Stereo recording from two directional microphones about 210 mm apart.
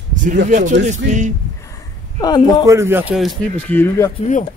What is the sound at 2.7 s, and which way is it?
Speech, 10° right (ahead or behind).